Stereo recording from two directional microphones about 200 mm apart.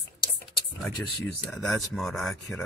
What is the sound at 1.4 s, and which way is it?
Speech, centre (ahead or behind).